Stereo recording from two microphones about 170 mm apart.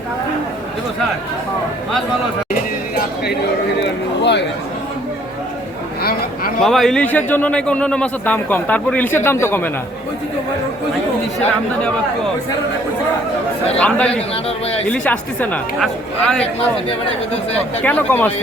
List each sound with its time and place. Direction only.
3.8 s a sound: 90° left
6.0 s a sound: 65° left (ahead or behind)
6.6 s a man's voice: centre (ahead or behind)
13.7 s a man's voice: 5° left (ahead or behind)
14.4 s speech: 35° left (ahead or behind)
14.8 s a man's voice: 5° left (ahead or behind)
17.8 s a man's voice: 10° left (ahead or behind)